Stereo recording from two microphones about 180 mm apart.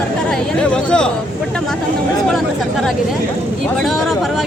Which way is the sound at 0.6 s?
5° left (ahead or behind).